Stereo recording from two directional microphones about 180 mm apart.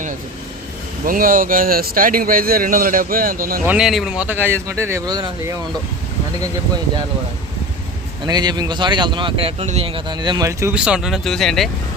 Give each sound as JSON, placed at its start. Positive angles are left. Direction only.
{"t": 1.0, "sound": "speech", "side_deg": -50}
{"t": 3.7, "sound": "speech", "side_deg": -5}
{"t": 8.3, "sound": "speech", "side_deg": -25}
{"t": 10.8, "sound": "speech", "side_deg": -5}